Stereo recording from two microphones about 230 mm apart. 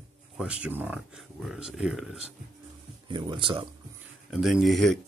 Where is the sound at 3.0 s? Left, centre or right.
Right.